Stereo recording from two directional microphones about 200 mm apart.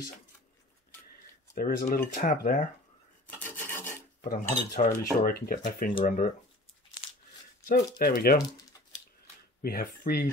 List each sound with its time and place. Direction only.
1.9 s cutlery: 40° left (ahead or behind)
3.3 s filing: 10° left (ahead or behind)
4.2 s cutlery: 35° left (ahead or behind)
6.0 s speech: 40° left (ahead or behind)
7.6 s cutlery: 45° left (ahead or behind)
9.6 s speech: 50° left (ahead or behind)